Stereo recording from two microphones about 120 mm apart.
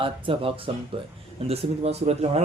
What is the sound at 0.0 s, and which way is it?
Speech, 50° right (ahead or behind).